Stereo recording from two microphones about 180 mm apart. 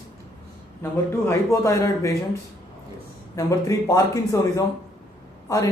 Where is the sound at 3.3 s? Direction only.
20° left (ahead or behind).